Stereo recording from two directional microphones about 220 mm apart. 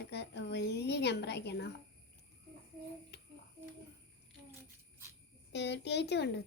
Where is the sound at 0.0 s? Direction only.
50° left (ahead or behind).